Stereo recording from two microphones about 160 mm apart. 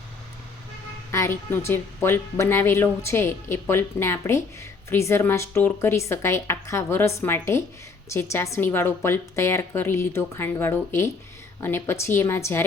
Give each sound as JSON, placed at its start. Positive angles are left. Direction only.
{"t": 1.1, "sound": "speech", "side_deg": 15}